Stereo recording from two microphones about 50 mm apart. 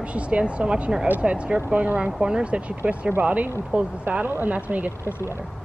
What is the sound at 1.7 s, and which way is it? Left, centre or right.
Speech, right.